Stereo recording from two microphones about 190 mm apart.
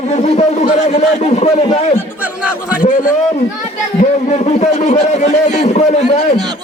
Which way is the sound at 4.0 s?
35° left (ahead or behind).